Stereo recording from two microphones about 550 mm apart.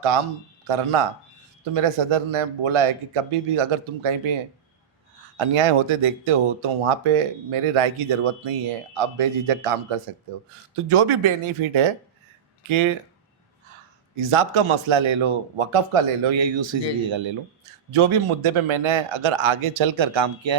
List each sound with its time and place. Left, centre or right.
0.7 s speech: right
5.4 s speech: right
10.8 s speech: right
14.2 s speech: right